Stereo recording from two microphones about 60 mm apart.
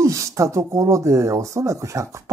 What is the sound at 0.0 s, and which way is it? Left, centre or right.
Speech, right.